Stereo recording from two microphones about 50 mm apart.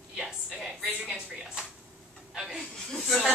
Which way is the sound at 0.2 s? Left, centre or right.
Centre.